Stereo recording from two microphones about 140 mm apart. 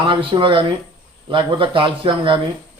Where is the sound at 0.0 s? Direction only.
35° right (ahead or behind).